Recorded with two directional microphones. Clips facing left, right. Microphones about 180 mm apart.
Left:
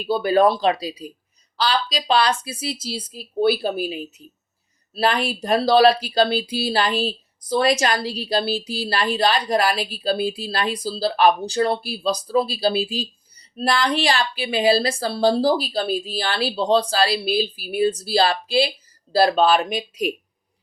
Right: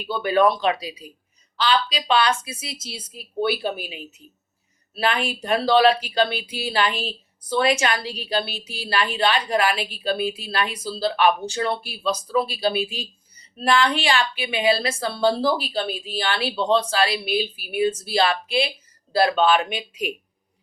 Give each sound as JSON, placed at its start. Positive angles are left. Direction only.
{"t": 0.0, "sound": "a woman's voice", "side_deg": 35}